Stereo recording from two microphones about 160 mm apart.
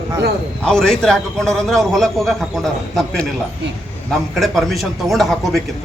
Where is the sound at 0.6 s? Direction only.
5° left (ahead or behind).